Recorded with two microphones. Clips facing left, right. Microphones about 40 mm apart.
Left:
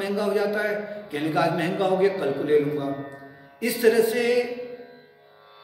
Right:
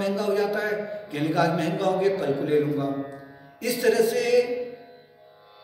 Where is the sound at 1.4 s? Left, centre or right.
Left.